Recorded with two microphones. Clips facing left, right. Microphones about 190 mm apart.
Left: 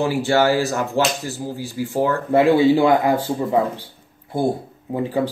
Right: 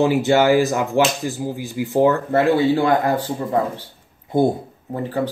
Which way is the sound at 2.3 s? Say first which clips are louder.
Left 2 dB; 10° left (ahead or behind).